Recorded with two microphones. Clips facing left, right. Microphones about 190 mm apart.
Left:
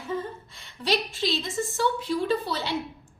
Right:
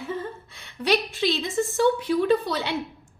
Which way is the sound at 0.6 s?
60° right (ahead or behind).